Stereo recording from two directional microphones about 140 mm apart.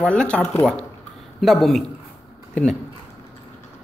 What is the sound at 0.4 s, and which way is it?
Speech, 20° left (ahead or behind).